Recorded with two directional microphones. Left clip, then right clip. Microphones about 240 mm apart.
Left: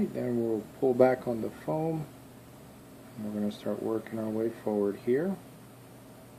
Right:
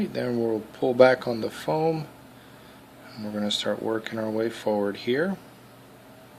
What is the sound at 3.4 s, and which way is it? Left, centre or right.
Speech, right.